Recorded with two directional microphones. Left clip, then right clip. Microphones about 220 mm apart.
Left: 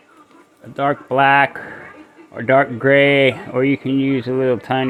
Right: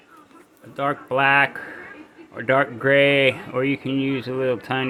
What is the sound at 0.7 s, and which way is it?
Speech, 25° left (ahead or behind).